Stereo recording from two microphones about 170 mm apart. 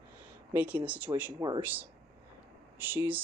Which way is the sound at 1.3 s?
20° right (ahead or behind).